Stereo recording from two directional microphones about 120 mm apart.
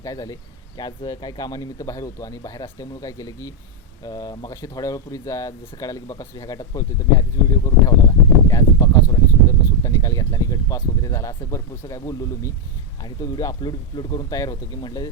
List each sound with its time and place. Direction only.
0.0 s speech: 30° left (ahead or behind)
8.4 s a sound: 30° left (ahead or behind)
13.0 s speech: 35° left (ahead or behind)